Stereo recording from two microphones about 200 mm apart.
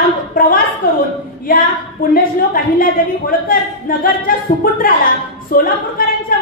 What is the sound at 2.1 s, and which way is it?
A woman's voice, 45° left (ahead or behind).